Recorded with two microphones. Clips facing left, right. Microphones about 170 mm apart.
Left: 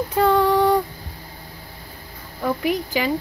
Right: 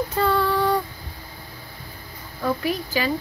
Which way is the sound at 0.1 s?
15° left (ahead or behind).